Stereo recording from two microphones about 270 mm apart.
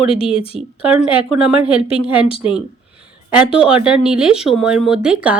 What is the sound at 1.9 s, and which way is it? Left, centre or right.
Speech, centre.